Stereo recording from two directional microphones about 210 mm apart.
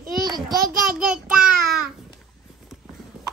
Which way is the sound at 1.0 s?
5° right (ahead or behind).